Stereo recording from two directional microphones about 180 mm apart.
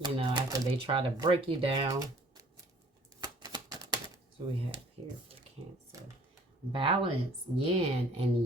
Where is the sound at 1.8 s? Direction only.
20° right (ahead or behind).